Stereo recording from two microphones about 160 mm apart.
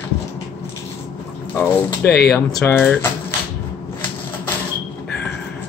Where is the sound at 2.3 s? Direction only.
10° left (ahead or behind).